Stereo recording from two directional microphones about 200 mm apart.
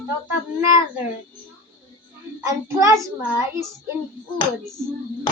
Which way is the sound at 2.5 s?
15° right (ahead or behind).